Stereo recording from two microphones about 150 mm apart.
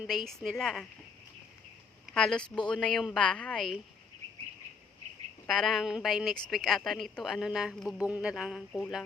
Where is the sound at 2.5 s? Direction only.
30° left (ahead or behind).